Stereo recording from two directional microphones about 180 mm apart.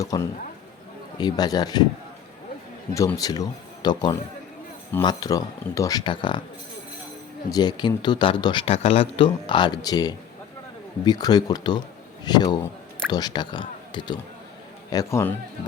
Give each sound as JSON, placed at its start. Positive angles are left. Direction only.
{"t": 0.0, "sound": "speech", "side_deg": 20}
{"t": 2.9, "sound": "speech", "side_deg": 20}
{"t": 7.5, "sound": "speech", "side_deg": 25}
{"t": 14.9, "sound": "speech", "side_deg": 15}